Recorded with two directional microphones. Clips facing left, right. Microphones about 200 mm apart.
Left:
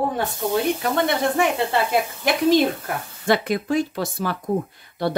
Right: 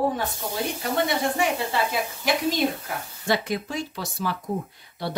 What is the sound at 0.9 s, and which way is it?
Speech, 60° left (ahead or behind).